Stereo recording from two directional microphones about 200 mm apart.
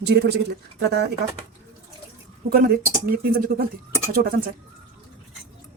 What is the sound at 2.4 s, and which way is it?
Speech, 45° right (ahead or behind).